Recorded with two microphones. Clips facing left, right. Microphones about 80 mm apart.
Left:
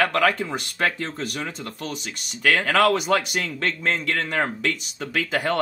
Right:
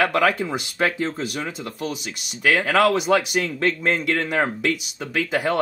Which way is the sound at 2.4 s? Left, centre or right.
Centre.